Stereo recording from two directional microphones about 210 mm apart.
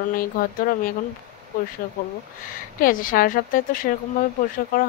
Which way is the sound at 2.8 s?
40° left (ahead or behind).